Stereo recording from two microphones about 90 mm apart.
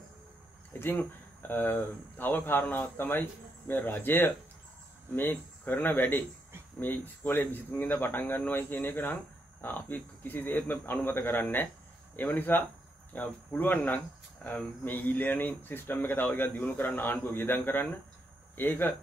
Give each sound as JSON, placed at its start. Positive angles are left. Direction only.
{"t": 0.7, "sound": "speech", "side_deg": 25}